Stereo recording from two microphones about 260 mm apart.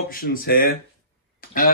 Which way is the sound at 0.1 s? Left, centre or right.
Left.